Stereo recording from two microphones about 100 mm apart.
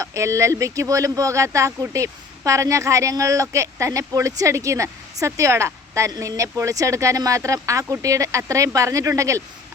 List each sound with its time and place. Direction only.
0.0 s speech: 30° right (ahead or behind)